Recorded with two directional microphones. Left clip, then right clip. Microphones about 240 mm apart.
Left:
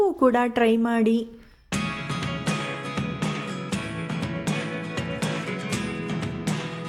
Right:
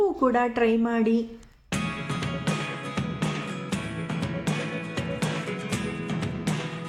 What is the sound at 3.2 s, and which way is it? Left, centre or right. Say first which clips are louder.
Music: left 1 dB; centre.